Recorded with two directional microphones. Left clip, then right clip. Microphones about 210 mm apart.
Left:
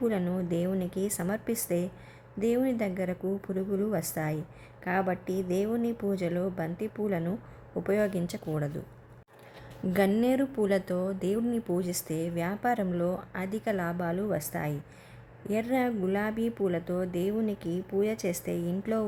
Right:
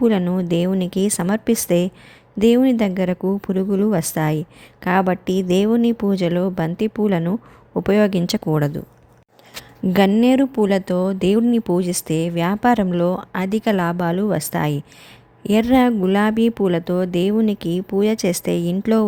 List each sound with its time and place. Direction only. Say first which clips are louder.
0.0 s speech: right 11 dB; 35° right (ahead or behind)
9.8 s speech: right 10 dB; 30° right (ahead or behind)